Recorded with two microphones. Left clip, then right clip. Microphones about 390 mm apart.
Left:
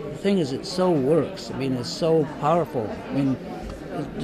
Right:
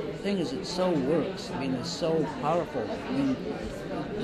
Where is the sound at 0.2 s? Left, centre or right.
Left.